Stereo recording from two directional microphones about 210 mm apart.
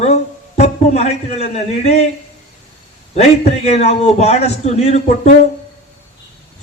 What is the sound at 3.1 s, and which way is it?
A man's voice, 30° left (ahead or behind).